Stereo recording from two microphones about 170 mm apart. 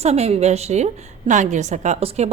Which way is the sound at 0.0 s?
40° right (ahead or behind).